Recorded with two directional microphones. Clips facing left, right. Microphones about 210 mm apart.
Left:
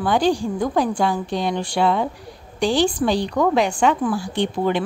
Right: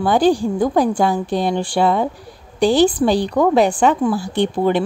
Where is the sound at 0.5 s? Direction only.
40° right (ahead or behind).